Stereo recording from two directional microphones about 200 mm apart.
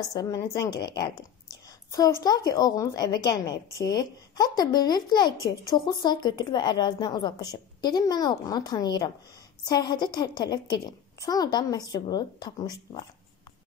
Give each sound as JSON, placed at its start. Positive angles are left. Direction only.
{"t": 0.1, "sound": "a woman's voice", "side_deg": 15}